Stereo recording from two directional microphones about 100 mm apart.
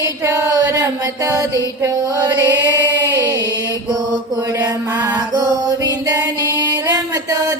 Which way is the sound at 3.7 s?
40° right (ahead or behind).